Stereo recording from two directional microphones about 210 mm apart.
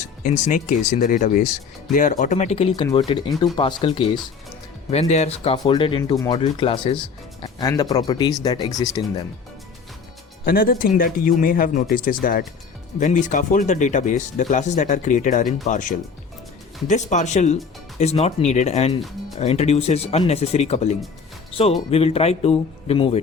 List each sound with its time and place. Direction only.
0.3 s speech: 35° left (ahead or behind); by 9.2 s 15° left (ahead or behind)
10.4 s a man's voice: 45° left (ahead or behind); by 23.2 s 25° left (ahead or behind)